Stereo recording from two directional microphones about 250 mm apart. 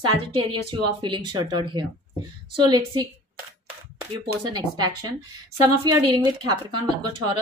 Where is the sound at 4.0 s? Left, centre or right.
Centre.